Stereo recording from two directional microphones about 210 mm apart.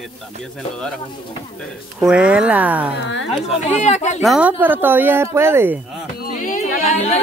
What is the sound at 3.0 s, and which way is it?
Speech, 60° left (ahead or behind).